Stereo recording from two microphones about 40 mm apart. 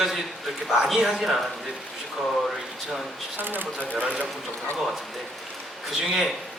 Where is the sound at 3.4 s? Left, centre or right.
Right.